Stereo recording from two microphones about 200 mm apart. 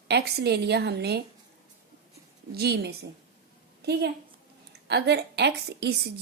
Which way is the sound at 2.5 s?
55° right (ahead or behind).